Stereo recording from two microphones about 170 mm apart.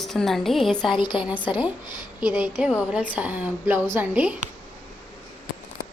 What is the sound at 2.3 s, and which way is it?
Speech, 5° right (ahead or behind).